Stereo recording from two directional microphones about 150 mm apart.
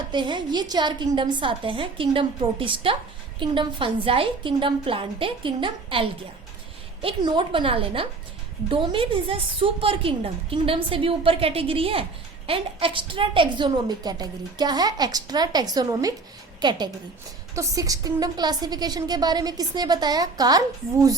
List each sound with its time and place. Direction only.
0.1 s a woman's voice: 30° right (ahead or behind)